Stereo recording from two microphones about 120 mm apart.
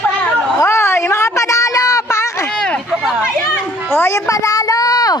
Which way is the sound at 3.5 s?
20° left (ahead or behind).